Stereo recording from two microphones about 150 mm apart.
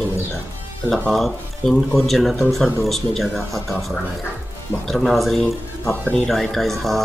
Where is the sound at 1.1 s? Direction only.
Centre (ahead or behind).